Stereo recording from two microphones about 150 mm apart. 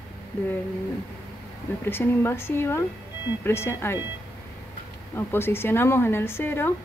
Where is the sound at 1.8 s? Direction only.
15° left (ahead or behind).